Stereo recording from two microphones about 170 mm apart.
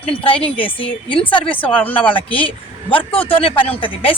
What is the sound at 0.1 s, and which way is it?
Speech, 30° left (ahead or behind).